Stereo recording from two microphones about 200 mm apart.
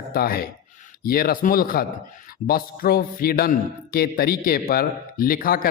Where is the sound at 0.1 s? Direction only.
50° left (ahead or behind).